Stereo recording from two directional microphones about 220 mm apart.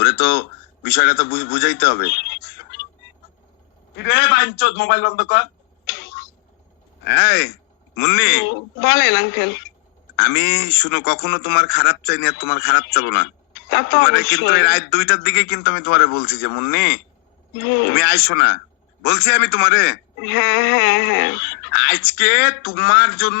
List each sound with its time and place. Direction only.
0.0 s a man's voice: 45° left (ahead or behind)
3.9 s a man's voice: 50° left (ahead or behind)
7.0 s a man's voice: 50° left (ahead or behind)